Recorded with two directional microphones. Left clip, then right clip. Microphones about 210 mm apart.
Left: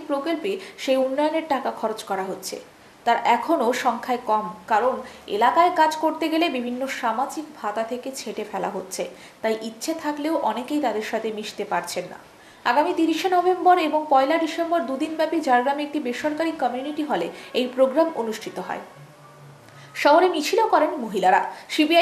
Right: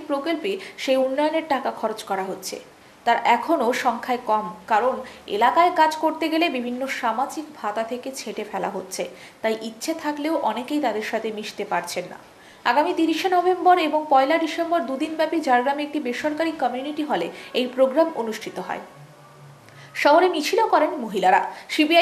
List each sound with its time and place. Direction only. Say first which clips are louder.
0.1 s speech: even; 5° left (ahead or behind)
8.9 s speech: even; 5° left (ahead or behind)
18.3 s speech: even; 5° left (ahead or behind)
20.0 s speech: even; 5° left (ahead or behind)